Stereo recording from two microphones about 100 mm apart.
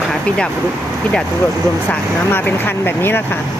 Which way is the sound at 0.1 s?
10° left (ahead or behind).